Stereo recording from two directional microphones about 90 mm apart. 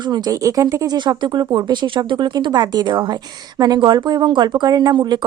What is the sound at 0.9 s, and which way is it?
Speech, 60° right (ahead or behind).